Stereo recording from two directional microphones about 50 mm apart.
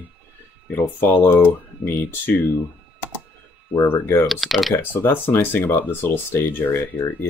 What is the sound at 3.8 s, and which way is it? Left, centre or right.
Speech, left.